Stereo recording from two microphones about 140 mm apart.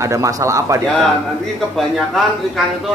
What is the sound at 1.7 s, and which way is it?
Speech, centre (ahead or behind).